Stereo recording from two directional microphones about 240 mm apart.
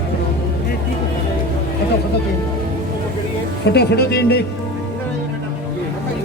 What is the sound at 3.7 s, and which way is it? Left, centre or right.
Speech, left.